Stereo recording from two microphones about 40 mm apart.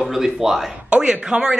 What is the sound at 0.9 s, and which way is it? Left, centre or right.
Speech, right.